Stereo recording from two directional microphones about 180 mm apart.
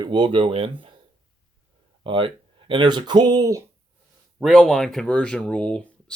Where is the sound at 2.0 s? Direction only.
30° right (ahead or behind).